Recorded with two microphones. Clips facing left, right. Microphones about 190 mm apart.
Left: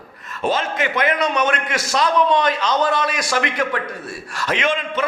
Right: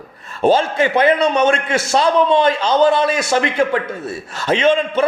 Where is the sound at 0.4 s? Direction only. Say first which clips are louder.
Right 7 dB; 30° right (ahead or behind).